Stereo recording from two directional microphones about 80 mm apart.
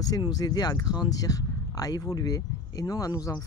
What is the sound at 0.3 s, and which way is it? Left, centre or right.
Speech, left.